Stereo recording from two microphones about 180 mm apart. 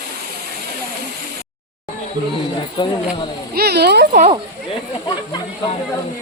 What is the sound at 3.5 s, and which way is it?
Speech, 60° right (ahead or behind).